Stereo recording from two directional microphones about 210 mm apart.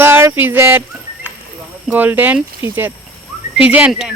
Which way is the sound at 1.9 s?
10° right (ahead or behind).